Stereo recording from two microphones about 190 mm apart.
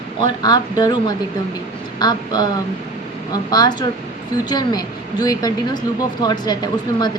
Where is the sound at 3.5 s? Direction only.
20° left (ahead or behind).